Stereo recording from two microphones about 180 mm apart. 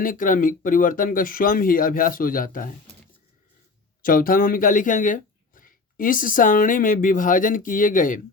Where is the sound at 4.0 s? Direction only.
50° left (ahead or behind).